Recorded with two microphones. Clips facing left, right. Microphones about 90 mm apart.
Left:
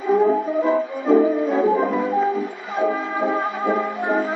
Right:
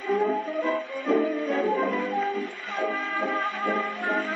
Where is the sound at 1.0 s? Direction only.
15° left (ahead or behind).